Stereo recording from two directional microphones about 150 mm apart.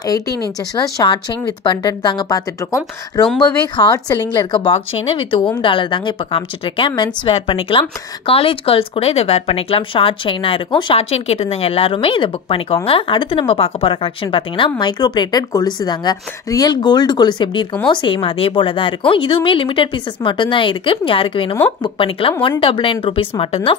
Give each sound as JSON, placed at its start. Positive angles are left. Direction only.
{"t": 0.9, "sound": "speech", "side_deg": 30}
{"t": 4.6, "sound": "speech", "side_deg": 40}